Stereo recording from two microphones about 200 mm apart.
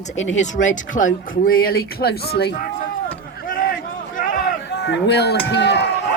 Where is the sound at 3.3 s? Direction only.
45° left (ahead or behind).